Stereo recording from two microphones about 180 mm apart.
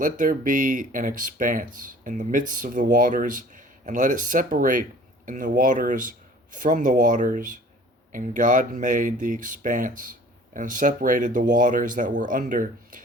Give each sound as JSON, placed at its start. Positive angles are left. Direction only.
{"t": 0.0, "sound": "speech", "side_deg": -45}